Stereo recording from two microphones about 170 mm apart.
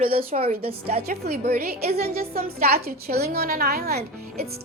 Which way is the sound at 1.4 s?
65° right (ahead or behind).